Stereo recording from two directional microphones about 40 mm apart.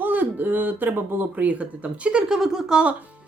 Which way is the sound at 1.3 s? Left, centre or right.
Right.